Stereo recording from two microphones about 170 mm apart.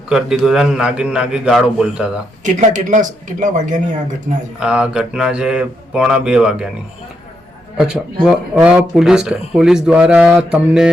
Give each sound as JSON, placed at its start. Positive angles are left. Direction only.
{"t": 0.1, "sound": "speech", "side_deg": 0}
{"t": 2.4, "sound": "speech", "side_deg": -45}
{"t": 4.6, "sound": "speech", "side_deg": -5}
{"t": 7.8, "sound": "speech", "side_deg": -5}